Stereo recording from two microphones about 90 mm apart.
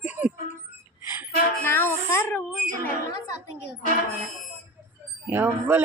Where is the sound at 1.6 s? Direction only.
25° left (ahead or behind).